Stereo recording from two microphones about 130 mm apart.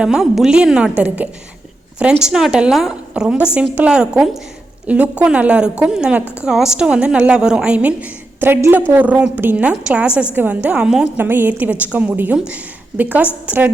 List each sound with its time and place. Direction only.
0.0 s a woman's voice: 5° right (ahead or behind)
11.2 s a woman's voice: 15° right (ahead or behind)